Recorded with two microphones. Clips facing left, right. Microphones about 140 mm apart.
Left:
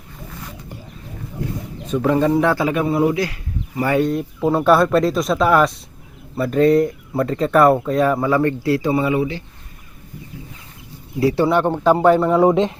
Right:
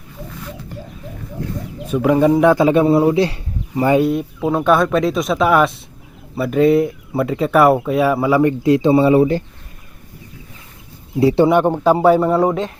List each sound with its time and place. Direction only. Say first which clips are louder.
1.9 s a man's voice: right 3 dB; 10° right (ahead or behind)
4.0 s speech: right 1 dB; 5° right (ahead or behind); by 9.2 s 30° right (ahead or behind)
11.2 s speech: right 4 dB; 25° right (ahead or behind)